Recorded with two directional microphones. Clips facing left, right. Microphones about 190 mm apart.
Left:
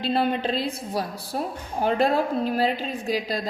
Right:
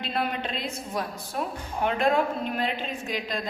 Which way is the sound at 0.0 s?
30° left (ahead or behind).